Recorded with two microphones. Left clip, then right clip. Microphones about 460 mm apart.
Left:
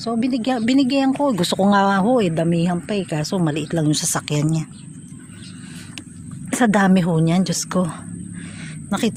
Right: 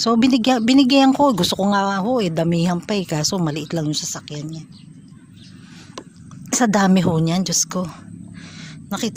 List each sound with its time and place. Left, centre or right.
0.0 s speech: right
6.5 s speech: right
8.4 s a sound: right